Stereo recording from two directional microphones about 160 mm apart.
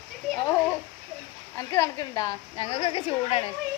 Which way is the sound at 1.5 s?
20° left (ahead or behind).